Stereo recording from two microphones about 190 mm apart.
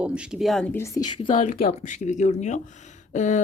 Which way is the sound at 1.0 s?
25° left (ahead or behind).